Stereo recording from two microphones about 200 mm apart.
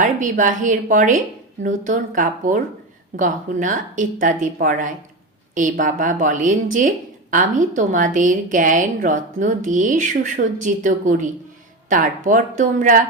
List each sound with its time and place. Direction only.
0.0 s a woman's voice: 40° right (ahead or behind)